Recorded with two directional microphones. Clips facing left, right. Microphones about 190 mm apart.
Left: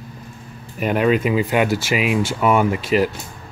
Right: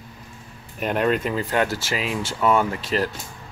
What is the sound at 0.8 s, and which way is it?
Speech, 5° left (ahead or behind).